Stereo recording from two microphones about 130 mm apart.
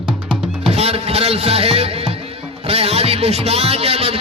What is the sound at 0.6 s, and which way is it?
A man's voice, 50° right (ahead or behind).